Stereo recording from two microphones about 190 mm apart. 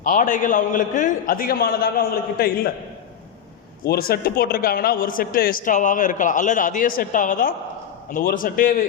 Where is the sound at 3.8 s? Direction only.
55° left (ahead or behind).